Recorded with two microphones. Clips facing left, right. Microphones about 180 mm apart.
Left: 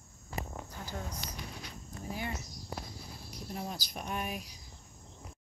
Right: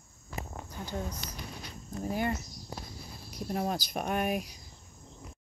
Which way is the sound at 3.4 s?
65° right (ahead or behind).